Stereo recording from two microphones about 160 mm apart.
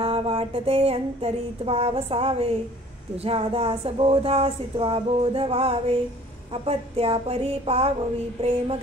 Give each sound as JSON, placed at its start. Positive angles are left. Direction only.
{"t": 0.0, "sound": "speech", "side_deg": -35}